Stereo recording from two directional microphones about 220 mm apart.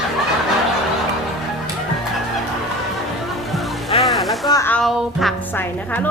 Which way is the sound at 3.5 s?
Centre (ahead or behind).